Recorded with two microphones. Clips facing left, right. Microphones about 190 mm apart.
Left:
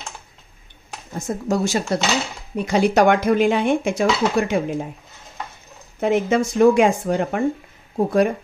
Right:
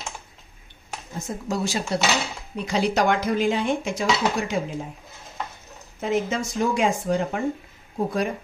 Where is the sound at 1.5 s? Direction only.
45° left (ahead or behind).